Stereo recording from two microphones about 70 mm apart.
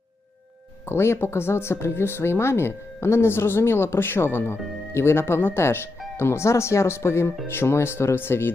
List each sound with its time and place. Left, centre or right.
0.9 s speech: left